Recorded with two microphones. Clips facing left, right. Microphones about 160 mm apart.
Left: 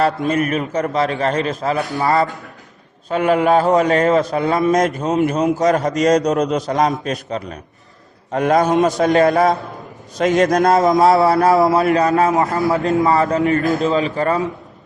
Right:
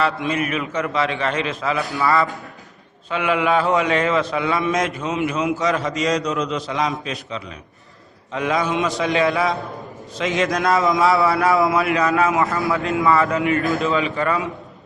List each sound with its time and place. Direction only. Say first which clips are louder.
0.0 s a man's voice: left 4 dB; 45° left (ahead or behind)